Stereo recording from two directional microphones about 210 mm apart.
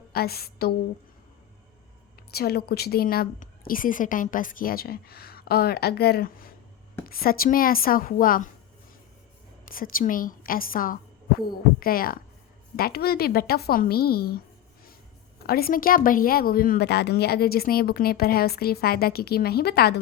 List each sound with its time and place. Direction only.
0.1 s a woman's voice: 45° left (ahead or behind)
2.3 s a woman's voice: 50° left (ahead or behind)
9.9 s a woman's voice: 40° left (ahead or behind)
15.4 s a woman's voice: 45° left (ahead or behind)